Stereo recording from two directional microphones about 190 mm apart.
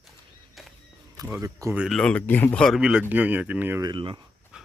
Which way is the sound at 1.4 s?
15° right (ahead or behind).